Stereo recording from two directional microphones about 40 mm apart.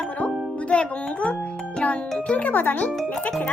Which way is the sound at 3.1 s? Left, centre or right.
Left.